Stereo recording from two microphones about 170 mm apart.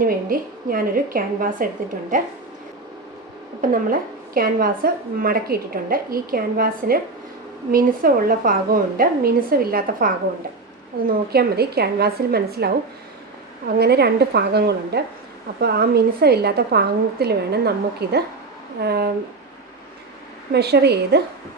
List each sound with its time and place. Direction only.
0.0 s a woman's voice: 55° right (ahead or behind)
3.6 s a woman's voice: 50° right (ahead or behind)
13.7 s a woman's voice: 70° right (ahead or behind)
20.5 s a woman's voice: 75° right (ahead or behind)